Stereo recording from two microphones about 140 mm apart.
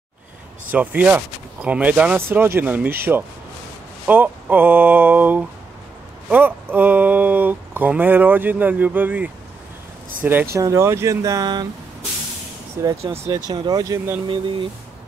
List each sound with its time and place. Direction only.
0.7 s speech: 10° right (ahead or behind); by 11.6 s 25° right (ahead or behind)
12.8 s speech: 20° right (ahead or behind)